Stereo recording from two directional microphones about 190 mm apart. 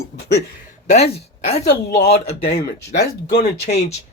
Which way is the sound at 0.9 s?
35° left (ahead or behind).